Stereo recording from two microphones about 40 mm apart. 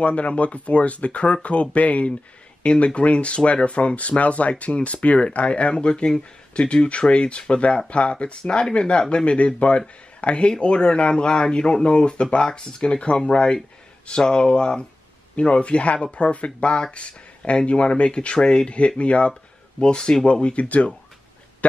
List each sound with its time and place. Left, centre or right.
0.0 s speech: left
20.4 s speech: left